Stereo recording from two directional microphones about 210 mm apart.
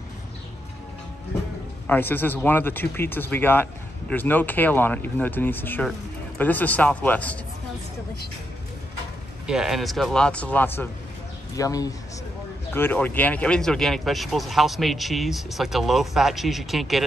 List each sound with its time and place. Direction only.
1.9 s speech: 10° left (ahead or behind)
9.5 s speech: centre (ahead or behind)